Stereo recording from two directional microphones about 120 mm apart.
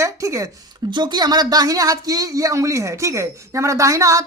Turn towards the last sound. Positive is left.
turn(degrees=-25)  # may be behind; listen again after turning